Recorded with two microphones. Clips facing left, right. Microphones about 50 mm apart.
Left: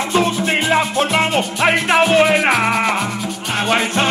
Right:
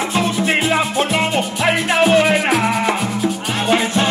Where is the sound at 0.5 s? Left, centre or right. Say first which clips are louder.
Even; centre.